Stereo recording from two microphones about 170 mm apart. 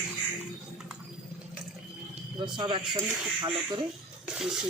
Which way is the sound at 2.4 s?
30° right (ahead or behind).